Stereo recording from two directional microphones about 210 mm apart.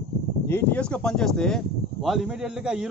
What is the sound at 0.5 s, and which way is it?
A man's voice, 10° left (ahead or behind).